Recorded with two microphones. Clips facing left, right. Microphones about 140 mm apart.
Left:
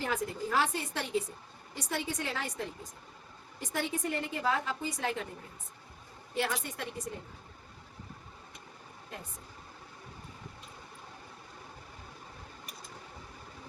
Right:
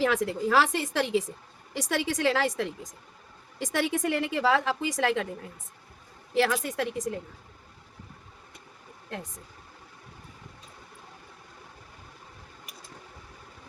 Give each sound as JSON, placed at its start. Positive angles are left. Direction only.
{"t": 0.0, "sound": "a woman's voice", "side_deg": -90}
{"t": 6.3, "sound": "a woman's voice", "side_deg": -90}